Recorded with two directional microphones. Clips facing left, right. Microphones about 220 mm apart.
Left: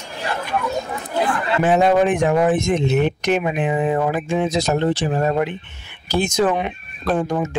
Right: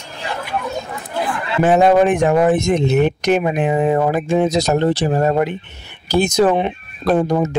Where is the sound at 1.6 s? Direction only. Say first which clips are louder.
Right 4 dB; 45° right (ahead or behind).